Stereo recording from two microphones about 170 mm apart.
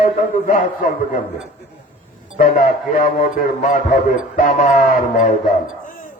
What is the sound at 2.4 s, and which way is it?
A man's voice, 45° left (ahead or behind).